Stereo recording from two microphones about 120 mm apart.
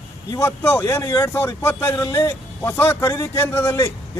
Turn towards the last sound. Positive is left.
turn(degrees=20)  # may be behind; listen again after turning